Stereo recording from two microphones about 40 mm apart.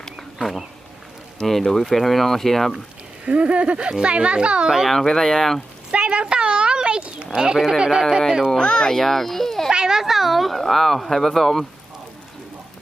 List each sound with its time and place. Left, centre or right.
0.2 s bee: centre
1.5 s speech: centre
3.2 s speech: right
4.9 s speech: centre
5.9 s a sound: right
7.3 s speech: centre
8.6 s a child's voice: left
8.9 s speech: centre
9.7 s speech: centre